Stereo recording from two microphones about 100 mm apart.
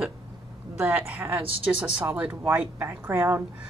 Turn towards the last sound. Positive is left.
turn(degrees=-20)  # may be behind; listen again after turning